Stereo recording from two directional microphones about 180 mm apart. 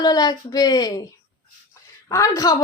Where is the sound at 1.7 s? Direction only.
15° left (ahead or behind).